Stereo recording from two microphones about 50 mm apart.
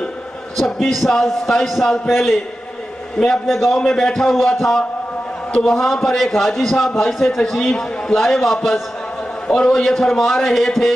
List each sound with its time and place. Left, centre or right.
0.8 s a man's voice: centre